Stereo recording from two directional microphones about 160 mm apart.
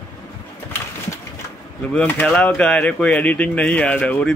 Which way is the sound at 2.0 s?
10° left (ahead or behind).